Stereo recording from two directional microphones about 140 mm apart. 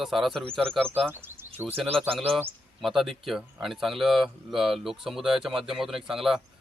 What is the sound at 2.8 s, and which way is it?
Speech, centre (ahead or behind).